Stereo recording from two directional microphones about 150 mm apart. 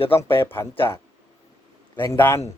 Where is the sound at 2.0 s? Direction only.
15° left (ahead or behind).